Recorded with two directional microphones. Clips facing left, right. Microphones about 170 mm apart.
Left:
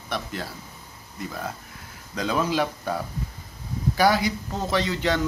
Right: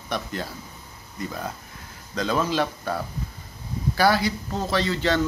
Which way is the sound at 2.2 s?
10° left (ahead or behind).